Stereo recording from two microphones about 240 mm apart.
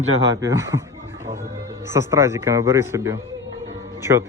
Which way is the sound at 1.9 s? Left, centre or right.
Centre.